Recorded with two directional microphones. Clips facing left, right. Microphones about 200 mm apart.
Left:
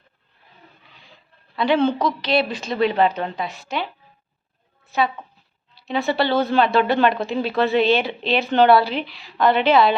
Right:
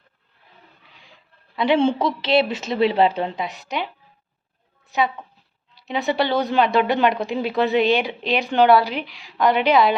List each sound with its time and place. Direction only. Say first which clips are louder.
1.5 s speech: even; 25° right (ahead or behind)
4.9 s speech: even; 15° right (ahead or behind)